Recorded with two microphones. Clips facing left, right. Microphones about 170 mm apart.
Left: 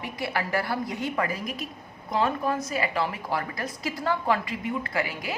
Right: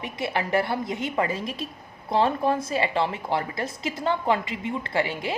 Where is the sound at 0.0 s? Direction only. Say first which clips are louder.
Right 2 dB; 20° right (ahead or behind).